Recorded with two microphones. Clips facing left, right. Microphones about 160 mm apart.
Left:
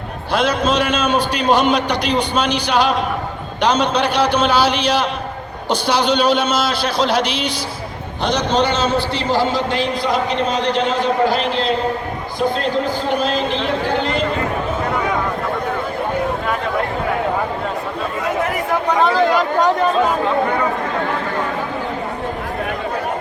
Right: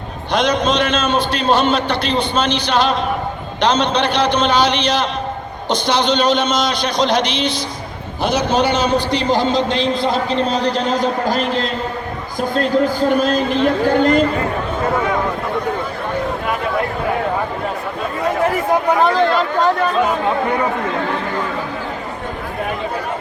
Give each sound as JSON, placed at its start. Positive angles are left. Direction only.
{"t": 0.3, "sound": "a man's voice", "side_deg": 5}
{"t": 8.2, "sound": "a man's voice", "side_deg": -10}
{"t": 13.1, "sound": "speech", "side_deg": -45}
{"t": 18.9, "sound": "speech", "side_deg": 0}